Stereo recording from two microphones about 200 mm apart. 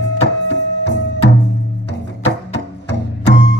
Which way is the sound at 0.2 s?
60° left (ahead or behind).